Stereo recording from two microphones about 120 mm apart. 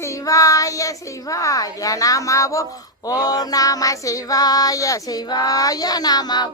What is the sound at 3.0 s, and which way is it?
Music, 35° left (ahead or behind).